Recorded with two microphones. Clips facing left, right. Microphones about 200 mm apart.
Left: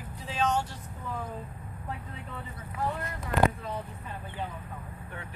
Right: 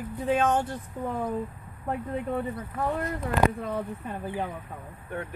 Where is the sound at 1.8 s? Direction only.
55° right (ahead or behind).